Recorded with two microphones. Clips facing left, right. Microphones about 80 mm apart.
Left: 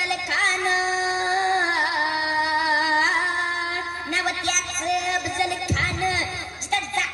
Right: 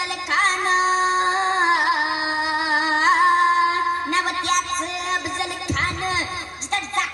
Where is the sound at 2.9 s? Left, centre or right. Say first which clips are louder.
Right 5 dB; right.